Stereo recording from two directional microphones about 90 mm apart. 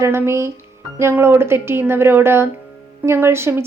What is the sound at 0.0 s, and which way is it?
Speech, 30° right (ahead or behind).